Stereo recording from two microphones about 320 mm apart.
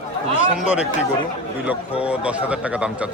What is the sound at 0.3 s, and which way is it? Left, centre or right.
Speech, left.